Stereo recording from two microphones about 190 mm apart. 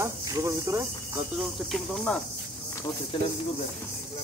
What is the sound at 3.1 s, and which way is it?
Speech, 25° left (ahead or behind).